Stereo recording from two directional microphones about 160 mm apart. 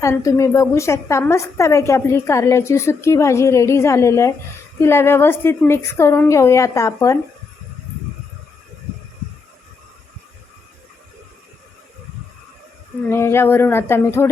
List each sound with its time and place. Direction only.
0.0 s a woman's voice: 20° left (ahead or behind)
13.1 s a woman's voice: 15° left (ahead or behind)